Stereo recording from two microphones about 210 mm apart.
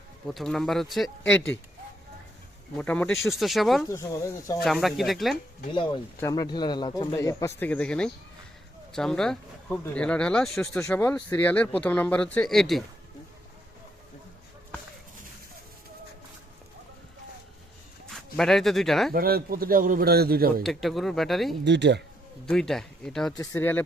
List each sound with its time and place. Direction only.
0.3 s speech: centre (ahead or behind)
2.7 s speech: 5° left (ahead or behind)
3.8 s speech: 15° left (ahead or behind)
4.6 s speech: centre (ahead or behind)
5.7 s speech: 25° left (ahead or behind); by 12.8 s centre (ahead or behind)
18.1 s speech: centre (ahead or behind)
19.1 s a man's voice: 45° right (ahead or behind)
20.7 s speech: centre (ahead or behind)
21.6 s speech: 55° right (ahead or behind)
22.4 s speech: centre (ahead or behind)
23.4 s speech: 10° left (ahead or behind)